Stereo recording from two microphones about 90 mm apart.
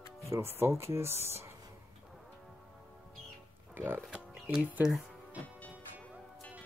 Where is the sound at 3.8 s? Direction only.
25° right (ahead or behind).